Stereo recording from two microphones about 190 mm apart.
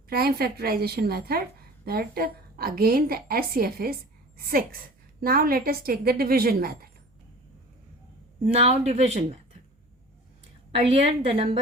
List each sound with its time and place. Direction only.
0.1 s a woman's voice: 50° right (ahead or behind)
8.5 s speech: 35° right (ahead or behind)
10.8 s a woman's voice: 30° right (ahead or behind)